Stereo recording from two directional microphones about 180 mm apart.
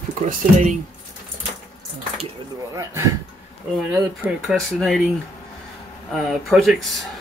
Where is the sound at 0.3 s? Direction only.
40° right (ahead or behind).